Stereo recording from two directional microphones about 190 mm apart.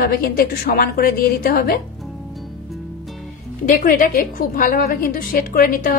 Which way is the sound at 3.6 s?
45° left (ahead or behind).